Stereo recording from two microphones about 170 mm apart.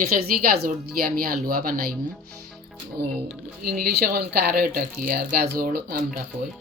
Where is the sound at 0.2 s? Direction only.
65° right (ahead or behind).